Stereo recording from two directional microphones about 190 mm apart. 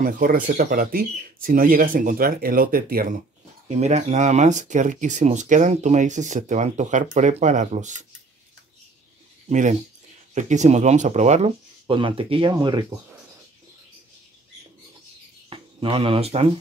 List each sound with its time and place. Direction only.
0.0 s speech: 45° right (ahead or behind)
3.6 s speech: 35° right (ahead or behind)
9.5 s speech: 40° right (ahead or behind); by 12.8 s 20° right (ahead or behind)
15.5 s speech: 30° right (ahead or behind)